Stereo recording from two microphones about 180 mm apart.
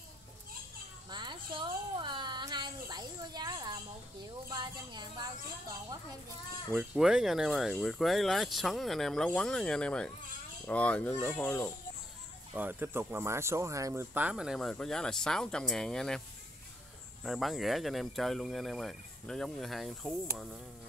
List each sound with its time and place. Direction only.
1.1 s a sound: 25° right (ahead or behind)
4.5 s a woman's voice: 25° right (ahead or behind)
6.7 s speech: 5° right (ahead or behind); by 11.7 s 10° left (ahead or behind)
12.5 s speech: 10° right (ahead or behind)
17.2 s speech: centre (ahead or behind)